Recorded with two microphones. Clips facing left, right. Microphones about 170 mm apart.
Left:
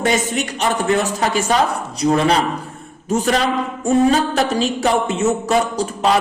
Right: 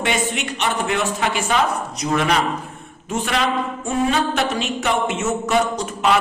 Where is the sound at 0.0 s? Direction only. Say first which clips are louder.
Left 4 dB; 40° left (ahead or behind).